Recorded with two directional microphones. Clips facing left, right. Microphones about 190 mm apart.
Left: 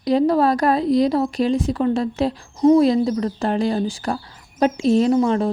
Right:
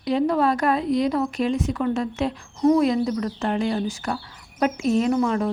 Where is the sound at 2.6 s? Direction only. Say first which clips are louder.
Left 4 dB; 20° left (ahead or behind).